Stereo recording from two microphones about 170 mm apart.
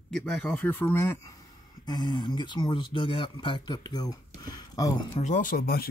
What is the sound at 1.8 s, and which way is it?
Speech, 25° left (ahead or behind).